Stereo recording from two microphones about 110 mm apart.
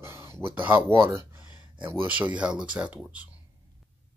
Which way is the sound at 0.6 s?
15° right (ahead or behind).